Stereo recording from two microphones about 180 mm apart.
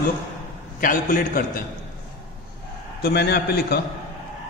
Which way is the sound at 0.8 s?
50° left (ahead or behind).